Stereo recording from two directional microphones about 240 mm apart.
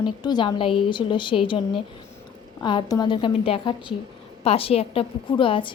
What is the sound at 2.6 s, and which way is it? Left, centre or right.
A woman's voice, centre.